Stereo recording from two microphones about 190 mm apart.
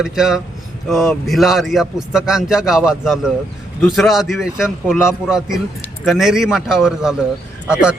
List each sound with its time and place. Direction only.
0.0 s a man's voice: 5° right (ahead or behind)